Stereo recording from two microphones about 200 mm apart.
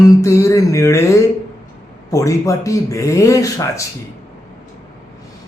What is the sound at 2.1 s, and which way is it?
Speech, 15° left (ahead or behind).